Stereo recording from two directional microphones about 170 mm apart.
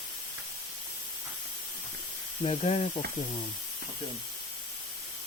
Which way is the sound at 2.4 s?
40° left (ahead or behind).